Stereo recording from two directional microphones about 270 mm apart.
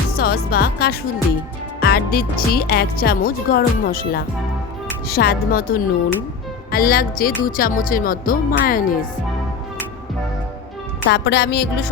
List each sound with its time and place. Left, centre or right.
0.1 s music: left
1.8 s speech: left
11.0 s speech: left